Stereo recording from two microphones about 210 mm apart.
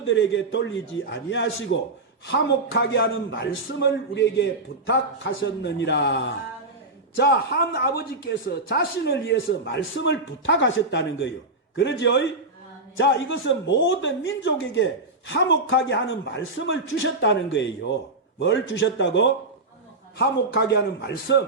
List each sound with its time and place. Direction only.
0.0 s a man's voice: 60° left (ahead or behind)